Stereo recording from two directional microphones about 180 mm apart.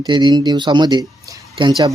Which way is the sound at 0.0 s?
25° right (ahead or behind).